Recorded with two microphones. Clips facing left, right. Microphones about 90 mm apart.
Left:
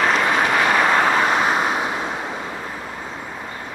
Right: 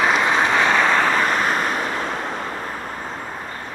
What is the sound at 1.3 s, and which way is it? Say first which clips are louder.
Vehicle: left 2 dB; 45° right (ahead or behind).